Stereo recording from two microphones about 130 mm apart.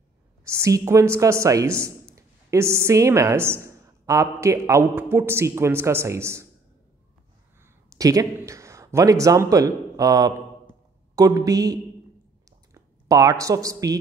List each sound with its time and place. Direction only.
0.5 s a woman's voice: 25° right (ahead or behind)
7.6 s speech: 25° right (ahead or behind)